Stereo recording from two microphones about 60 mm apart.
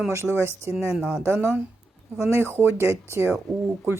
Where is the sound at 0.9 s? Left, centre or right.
Centre.